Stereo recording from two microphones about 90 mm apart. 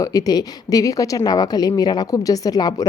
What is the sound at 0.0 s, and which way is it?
A woman's voice, 40° left (ahead or behind).